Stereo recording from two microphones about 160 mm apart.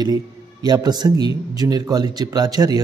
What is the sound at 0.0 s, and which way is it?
A man's voice, 25° right (ahead or behind).